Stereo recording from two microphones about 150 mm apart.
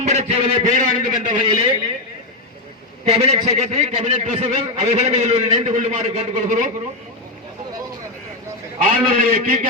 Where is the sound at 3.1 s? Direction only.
40° right (ahead or behind); by 6.7 s 60° right (ahead or behind).